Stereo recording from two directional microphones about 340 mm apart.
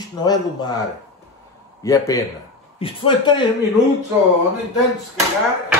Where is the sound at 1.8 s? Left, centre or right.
Centre.